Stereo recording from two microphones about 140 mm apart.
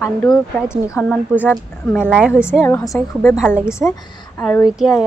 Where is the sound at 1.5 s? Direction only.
10° left (ahead or behind).